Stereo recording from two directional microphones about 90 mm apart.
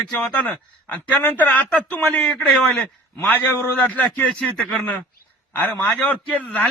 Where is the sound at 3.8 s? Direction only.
15° left (ahead or behind).